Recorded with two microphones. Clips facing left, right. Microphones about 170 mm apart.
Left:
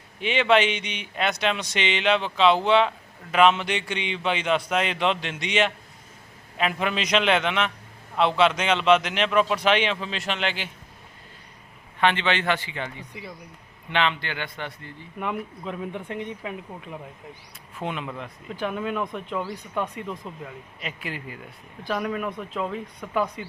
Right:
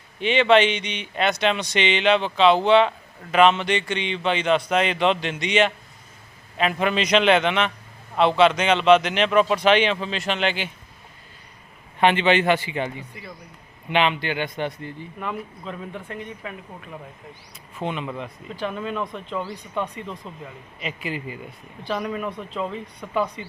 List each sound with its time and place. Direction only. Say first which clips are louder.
0.2 s speech: right 3 dB; 5° left (ahead or behind)
11.9 s a man's voice: right 5 dB; 15° right (ahead or behind)
15.2 s speech: left 2 dB; 15° left (ahead or behind)
17.7 s speech: right 3 dB; centre (ahead or behind)